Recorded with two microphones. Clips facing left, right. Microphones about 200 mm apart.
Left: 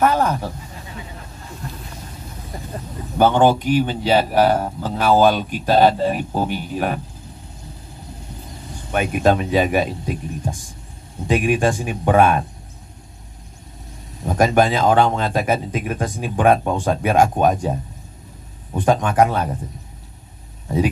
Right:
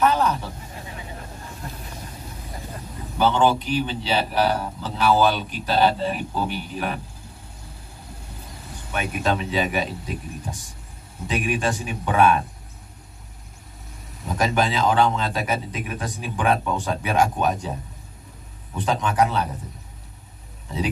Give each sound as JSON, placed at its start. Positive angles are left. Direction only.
{"t": 0.0, "sound": "speech", "side_deg": 50}
{"t": 3.2, "sound": "a man's voice", "side_deg": 50}
{"t": 8.9, "sound": "a man's voice", "side_deg": 50}
{"t": 11.2, "sound": "a man's voice", "side_deg": 50}
{"t": 14.2, "sound": "a man's voice", "side_deg": 45}